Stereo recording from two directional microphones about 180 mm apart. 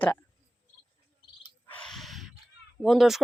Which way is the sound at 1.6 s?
5° left (ahead or behind).